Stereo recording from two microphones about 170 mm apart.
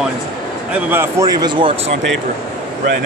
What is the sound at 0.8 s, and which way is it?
Speech, 15° right (ahead or behind).